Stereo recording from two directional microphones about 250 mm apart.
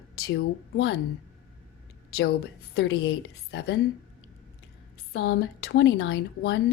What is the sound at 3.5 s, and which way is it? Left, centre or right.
Speech, left.